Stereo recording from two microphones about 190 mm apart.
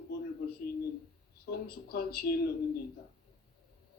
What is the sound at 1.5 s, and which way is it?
Speech, 55° left (ahead or behind).